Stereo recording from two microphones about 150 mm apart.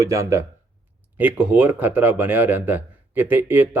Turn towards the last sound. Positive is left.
turn(degrees=-15)  # may be behind; listen again after turning